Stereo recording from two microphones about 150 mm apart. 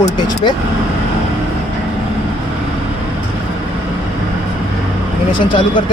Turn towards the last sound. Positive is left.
turn(degrees=30)  # may be behind; listen again after turning